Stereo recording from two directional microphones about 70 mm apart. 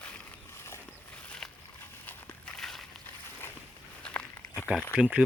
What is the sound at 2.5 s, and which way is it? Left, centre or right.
Walk, centre.